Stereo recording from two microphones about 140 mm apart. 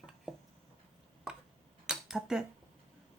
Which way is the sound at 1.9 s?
5° right (ahead or behind).